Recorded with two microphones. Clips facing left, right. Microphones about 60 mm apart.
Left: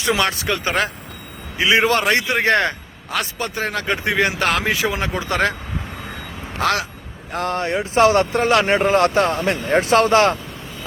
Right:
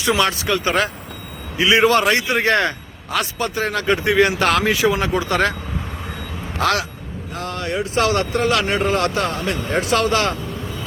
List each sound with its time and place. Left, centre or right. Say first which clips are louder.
0.1 s a man's voice: right 2 dB; left
6.6 s a man's voice: right 1 dB; left
7.3 s a man's voice: left 3 dB; left